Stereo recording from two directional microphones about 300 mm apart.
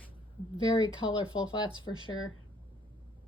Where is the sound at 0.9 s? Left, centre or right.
Centre.